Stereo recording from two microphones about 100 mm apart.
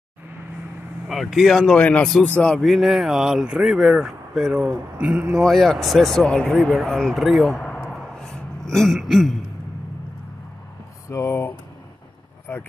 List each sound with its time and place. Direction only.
1.0 s speech: centre (ahead or behind)
5.4 s speech: centre (ahead or behind)
11.1 s speech: 30° left (ahead or behind)
12.5 s a sound: 20° left (ahead or behind)